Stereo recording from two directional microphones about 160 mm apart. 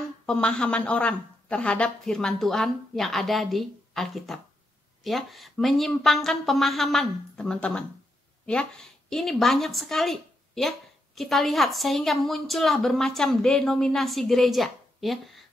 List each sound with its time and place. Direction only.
0.3 s a woman's voice: 5° left (ahead or behind)